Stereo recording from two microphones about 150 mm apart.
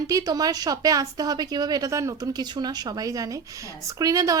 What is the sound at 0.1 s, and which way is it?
A woman's voice, 25° right (ahead or behind).